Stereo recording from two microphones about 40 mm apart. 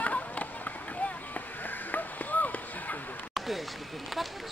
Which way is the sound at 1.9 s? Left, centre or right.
Left.